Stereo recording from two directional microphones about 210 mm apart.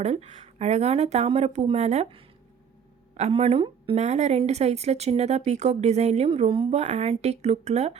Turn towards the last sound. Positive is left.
turn(degrees=-30)  # may be behind; listen again after turning